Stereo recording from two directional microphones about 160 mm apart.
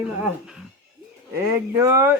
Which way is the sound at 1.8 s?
20° right (ahead or behind).